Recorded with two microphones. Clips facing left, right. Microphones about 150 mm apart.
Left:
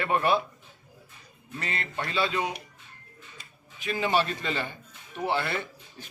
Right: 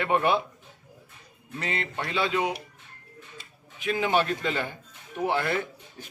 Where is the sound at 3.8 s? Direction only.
15° right (ahead or behind).